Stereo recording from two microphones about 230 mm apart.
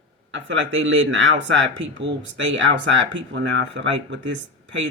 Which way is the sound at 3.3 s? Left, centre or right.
Right.